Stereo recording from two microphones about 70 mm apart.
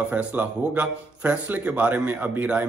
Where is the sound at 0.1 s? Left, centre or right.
Right.